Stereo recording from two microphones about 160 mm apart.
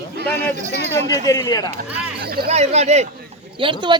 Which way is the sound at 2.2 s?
70° right (ahead or behind).